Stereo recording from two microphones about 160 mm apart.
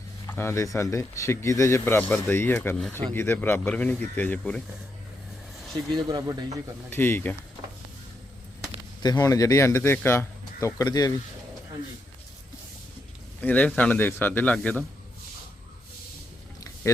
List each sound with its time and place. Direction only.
0.3 s speech: 15° left (ahead or behind)
5.9 s speech: 25° right (ahead or behind)
6.9 s speech: 15° left (ahead or behind)
9.0 s speech: 25° left (ahead or behind)
13.4 s speech: 10° left (ahead or behind)
16.6 s a sound: 20° left (ahead or behind)